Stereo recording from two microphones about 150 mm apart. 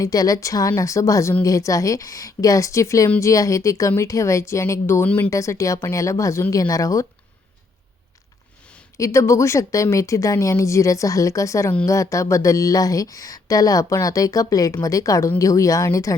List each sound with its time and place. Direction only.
0.0 s speech: 25° left (ahead or behind)
9.0 s speech: 20° left (ahead or behind)